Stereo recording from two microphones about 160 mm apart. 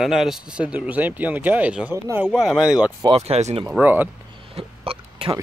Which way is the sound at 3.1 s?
40° right (ahead or behind).